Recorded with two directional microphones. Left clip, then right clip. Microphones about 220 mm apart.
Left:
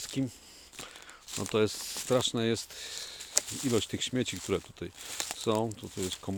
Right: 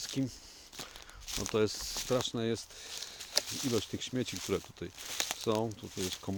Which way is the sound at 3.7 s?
30° left (ahead or behind).